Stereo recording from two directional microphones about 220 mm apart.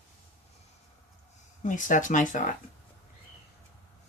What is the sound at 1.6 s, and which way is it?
Speech, 35° left (ahead or behind).